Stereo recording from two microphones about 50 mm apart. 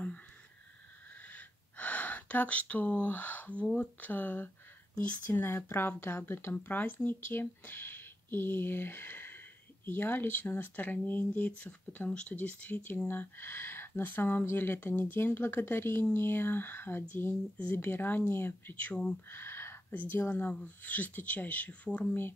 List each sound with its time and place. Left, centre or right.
1.2 s gasp: left
3.7 s speech: left
13.1 s speech: left
17.3 s speech: left
17.7 s speech: left
19.2 s a sound: left
19.9 s speech: left